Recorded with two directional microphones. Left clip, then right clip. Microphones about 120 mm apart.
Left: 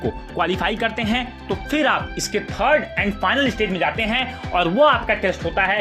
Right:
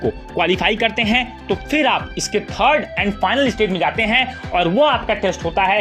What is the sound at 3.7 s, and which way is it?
Speech, 40° right (ahead or behind).